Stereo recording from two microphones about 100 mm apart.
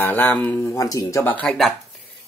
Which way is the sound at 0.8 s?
35° left (ahead or behind).